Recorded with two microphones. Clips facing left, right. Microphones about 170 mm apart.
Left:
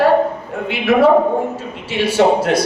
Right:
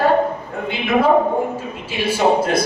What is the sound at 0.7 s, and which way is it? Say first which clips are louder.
Speech: left 4 dB; 80° left.